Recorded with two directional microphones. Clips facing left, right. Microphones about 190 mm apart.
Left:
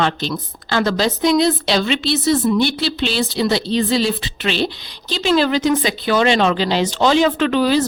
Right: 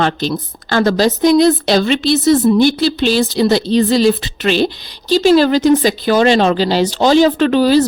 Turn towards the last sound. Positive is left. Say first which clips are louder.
# right 5 dB
turn(degrees=-35)  # may be behind; listen again after turning